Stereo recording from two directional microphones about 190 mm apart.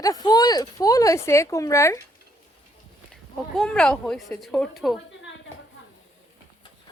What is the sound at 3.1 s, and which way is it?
Speech, 5° left (ahead or behind).